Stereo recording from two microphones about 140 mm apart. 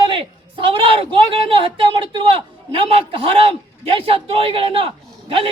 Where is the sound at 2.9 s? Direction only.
40° right (ahead or behind).